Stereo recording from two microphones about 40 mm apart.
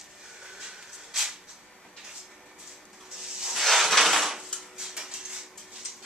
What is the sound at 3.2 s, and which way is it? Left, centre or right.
Hiss, centre.